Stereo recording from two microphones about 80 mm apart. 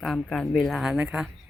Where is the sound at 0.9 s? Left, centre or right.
Centre.